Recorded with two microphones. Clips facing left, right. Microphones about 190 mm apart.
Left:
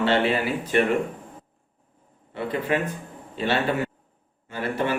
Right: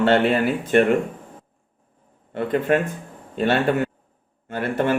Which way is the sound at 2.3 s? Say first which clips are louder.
Right 5 dB; 50° right (ahead or behind).